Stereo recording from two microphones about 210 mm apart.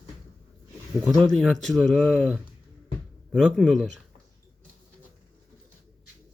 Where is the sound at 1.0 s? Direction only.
15° right (ahead or behind).